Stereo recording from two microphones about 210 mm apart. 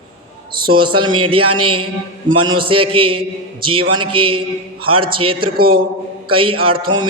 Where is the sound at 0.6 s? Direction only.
25° right (ahead or behind).